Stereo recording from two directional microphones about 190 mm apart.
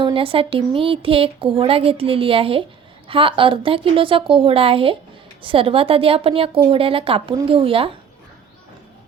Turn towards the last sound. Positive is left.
turn(degrees=-30)  # may be behind; listen again after turning